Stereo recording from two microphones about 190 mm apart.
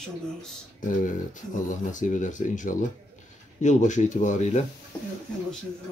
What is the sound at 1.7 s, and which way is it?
Speech, 40° left (ahead or behind).